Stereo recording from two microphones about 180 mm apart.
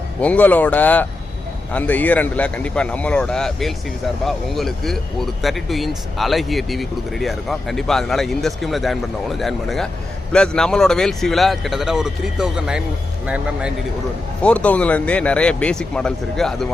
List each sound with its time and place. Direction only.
0.2 s speech: 10° left (ahead or behind)
14.4 s speech: 5° left (ahead or behind)